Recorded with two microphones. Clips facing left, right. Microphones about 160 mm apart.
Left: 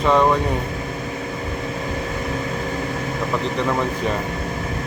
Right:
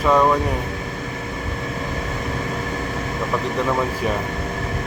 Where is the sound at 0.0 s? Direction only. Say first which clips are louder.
Even; centre (ahead or behind).